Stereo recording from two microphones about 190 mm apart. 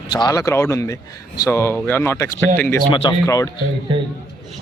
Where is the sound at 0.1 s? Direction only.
20° left (ahead or behind).